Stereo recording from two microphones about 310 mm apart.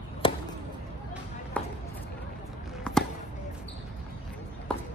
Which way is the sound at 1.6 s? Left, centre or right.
Centre.